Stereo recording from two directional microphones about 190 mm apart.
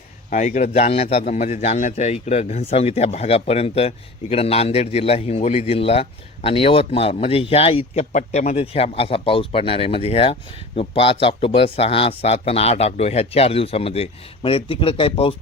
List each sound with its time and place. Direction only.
0.3 s a man's voice: 40° left (ahead or behind)